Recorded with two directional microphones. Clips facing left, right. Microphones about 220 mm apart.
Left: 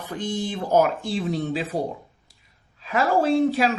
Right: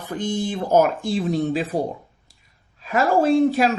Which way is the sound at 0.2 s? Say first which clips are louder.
Right 3 dB; 45° right (ahead or behind).